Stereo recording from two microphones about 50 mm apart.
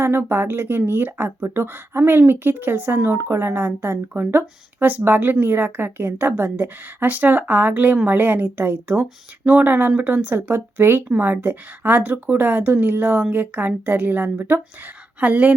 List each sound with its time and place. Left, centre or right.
0.3 s speech: right
3.2 s a woman's voice: right
15.2 s speech: right